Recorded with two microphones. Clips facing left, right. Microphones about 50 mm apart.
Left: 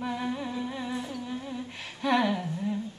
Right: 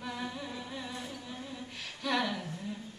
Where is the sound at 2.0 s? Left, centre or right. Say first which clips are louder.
Left 7 dB; left.